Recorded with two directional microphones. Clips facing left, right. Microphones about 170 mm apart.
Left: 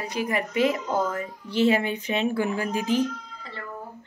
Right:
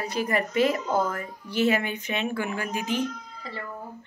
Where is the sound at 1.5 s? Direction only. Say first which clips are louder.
Left 2 dB; 30° left (ahead or behind).